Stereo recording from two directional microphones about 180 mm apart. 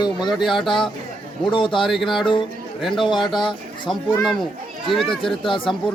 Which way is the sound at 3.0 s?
25° left (ahead or behind).